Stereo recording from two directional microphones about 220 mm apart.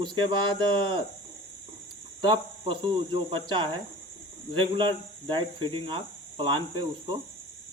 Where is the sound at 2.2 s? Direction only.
20° right (ahead or behind).